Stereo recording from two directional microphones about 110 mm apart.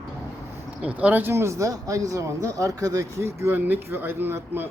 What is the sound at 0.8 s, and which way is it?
Speech, 15° right (ahead or behind).